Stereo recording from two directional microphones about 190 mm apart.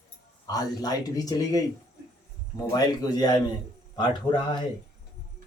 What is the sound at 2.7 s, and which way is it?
Speech, 20° left (ahead or behind).